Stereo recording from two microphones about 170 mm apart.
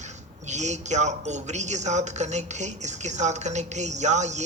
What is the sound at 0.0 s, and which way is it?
Speech, 45° right (ahead or behind).